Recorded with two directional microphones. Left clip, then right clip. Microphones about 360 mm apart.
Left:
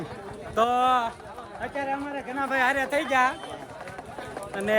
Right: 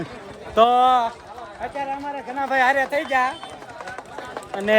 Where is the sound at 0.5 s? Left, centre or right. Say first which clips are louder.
Right 7 dB; centre.